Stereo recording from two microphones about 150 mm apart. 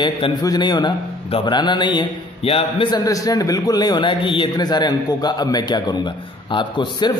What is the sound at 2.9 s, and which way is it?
A man's voice, 25° left (ahead or behind).